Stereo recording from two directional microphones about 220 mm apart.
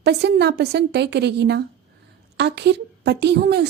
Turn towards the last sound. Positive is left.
turn(degrees=-50)  # may be behind; listen again after turning